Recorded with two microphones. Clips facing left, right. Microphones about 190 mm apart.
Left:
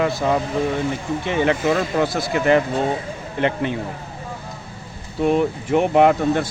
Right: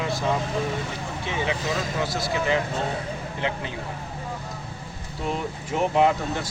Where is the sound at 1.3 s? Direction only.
60° left (ahead or behind).